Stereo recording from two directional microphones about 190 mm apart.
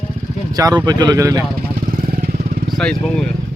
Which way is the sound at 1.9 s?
50° right (ahead or behind).